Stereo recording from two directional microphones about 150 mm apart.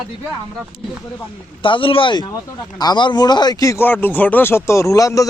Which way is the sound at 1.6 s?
35° left (ahead or behind).